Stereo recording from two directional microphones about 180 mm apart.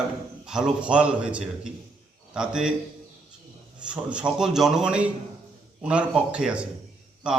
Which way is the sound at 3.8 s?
5° right (ahead or behind).